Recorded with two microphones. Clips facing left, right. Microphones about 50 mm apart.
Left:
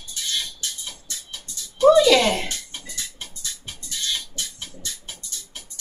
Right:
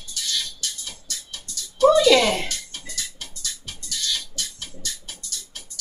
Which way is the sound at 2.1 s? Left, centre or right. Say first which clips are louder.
Right 1 dB; centre.